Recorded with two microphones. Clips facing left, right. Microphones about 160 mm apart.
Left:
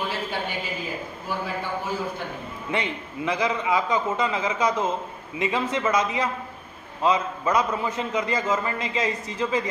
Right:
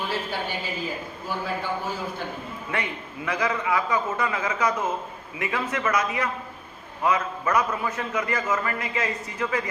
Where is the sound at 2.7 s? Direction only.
20° left (ahead or behind).